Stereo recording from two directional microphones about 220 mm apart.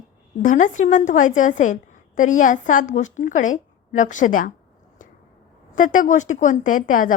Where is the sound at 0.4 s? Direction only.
35° left (ahead or behind).